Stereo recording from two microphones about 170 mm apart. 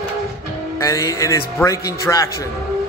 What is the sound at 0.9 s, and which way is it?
Speech, 20° left (ahead or behind).